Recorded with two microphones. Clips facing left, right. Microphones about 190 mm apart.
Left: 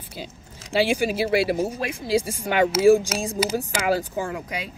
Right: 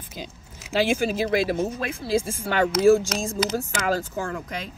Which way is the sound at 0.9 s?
10° left (ahead or behind).